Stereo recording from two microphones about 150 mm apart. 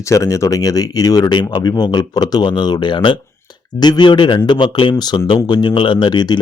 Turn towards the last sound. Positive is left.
turn(degrees=30)  # may be behind; listen again after turning